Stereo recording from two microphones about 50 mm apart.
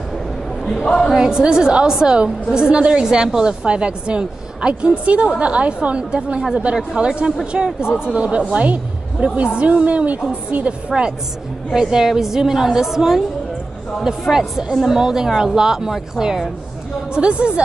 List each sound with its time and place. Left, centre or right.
1.1 s a woman's voice: centre
8.0 s a woman's voice: right
10.9 s a woman's voice: centre
14.2 s a woman's voice: centre
17.1 s a woman's voice: centre